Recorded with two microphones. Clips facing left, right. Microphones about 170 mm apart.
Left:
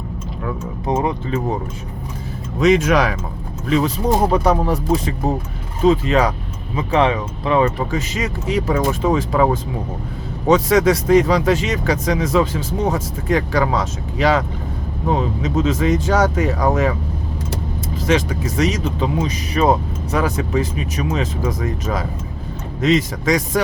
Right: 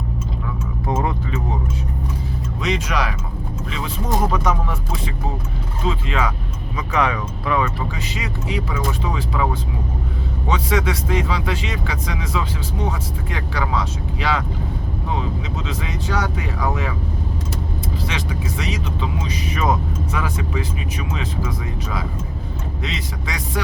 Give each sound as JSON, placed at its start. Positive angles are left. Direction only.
{"t": 0.9, "sound": "speech", "side_deg": 20}
{"t": 2.6, "sound": "speech", "side_deg": 50}
{"t": 6.7, "sound": "speech", "side_deg": 30}
{"t": 7.8, "sound": "speech", "side_deg": 45}
{"t": 18.0, "sound": "speech", "side_deg": 45}